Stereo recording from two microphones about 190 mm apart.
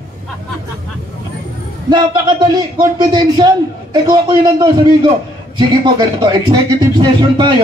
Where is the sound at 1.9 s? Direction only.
25° right (ahead or behind).